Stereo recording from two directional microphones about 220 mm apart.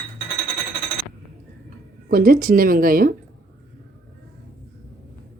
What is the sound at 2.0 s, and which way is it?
Speech, 40° right (ahead or behind).